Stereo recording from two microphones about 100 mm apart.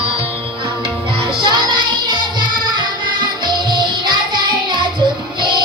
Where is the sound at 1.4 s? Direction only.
50° right (ahead or behind).